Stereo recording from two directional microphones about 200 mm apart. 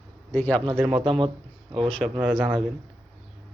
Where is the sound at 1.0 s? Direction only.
25° right (ahead or behind).